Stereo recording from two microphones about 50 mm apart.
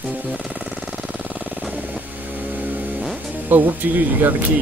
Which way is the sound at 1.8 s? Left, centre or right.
Right.